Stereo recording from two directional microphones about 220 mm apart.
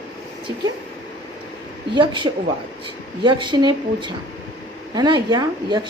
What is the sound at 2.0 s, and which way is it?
A woman's voice, 20° right (ahead or behind).